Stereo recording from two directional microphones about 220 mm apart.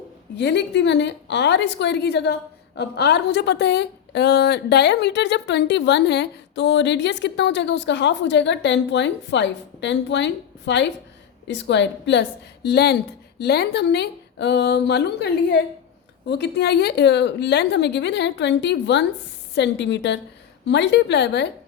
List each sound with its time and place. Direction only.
0.3 s a woman's voice: 50° left (ahead or behind)